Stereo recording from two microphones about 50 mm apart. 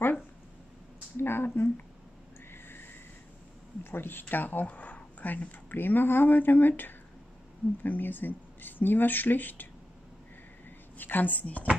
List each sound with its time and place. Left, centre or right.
1.1 s a sound: left
3.8 s speech: left
7.8 s speech: left
11.0 s speech: left